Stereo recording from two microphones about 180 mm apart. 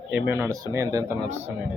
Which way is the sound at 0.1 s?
15° right (ahead or behind).